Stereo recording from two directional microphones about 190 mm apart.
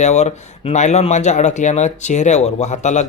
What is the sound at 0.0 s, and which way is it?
Speech, 35° left (ahead or behind).